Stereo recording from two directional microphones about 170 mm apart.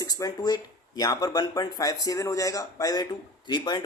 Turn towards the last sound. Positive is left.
turn(degrees=25)  # may be behind; listen again after turning